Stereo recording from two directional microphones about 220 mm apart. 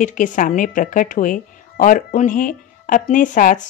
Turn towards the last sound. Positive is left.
turn(degrees=35)  # may be behind; listen again after turning